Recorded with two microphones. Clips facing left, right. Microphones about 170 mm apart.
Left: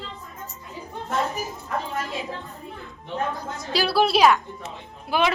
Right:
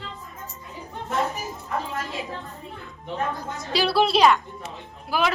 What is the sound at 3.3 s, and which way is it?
A woman's voice, centre (ahead or behind).